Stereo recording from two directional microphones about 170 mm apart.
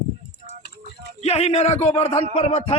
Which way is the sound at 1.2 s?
40° left (ahead or behind).